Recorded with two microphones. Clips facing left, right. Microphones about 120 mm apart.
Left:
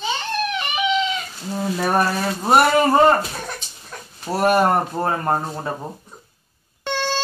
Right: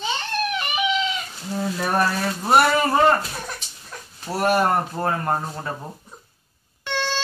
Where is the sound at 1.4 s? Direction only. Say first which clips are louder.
Left 3 dB; 15° left (ahead or behind).